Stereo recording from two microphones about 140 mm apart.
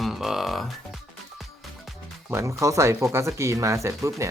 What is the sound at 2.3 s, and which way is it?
Speech, 20° right (ahead or behind).